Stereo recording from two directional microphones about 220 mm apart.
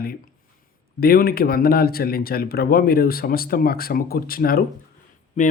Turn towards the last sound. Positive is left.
turn(degrees=30)  # may be behind; listen again after turning